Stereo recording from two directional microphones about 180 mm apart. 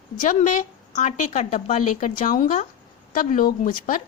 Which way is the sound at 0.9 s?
45° left (ahead or behind).